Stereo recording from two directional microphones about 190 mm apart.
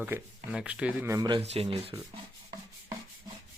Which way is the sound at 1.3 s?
30° right (ahead or behind).